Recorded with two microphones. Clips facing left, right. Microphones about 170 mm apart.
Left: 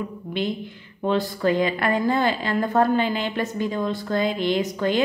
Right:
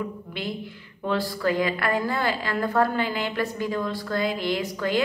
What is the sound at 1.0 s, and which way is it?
A woman's voice, 20° left (ahead or behind).